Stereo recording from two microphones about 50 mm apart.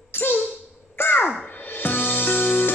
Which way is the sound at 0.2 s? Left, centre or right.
Left.